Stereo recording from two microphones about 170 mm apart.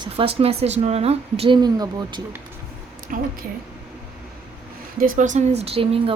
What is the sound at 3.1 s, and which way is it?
Speech, 50° right (ahead or behind).